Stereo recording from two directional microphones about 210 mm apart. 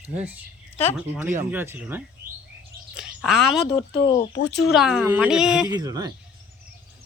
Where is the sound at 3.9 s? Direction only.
50° left (ahead or behind).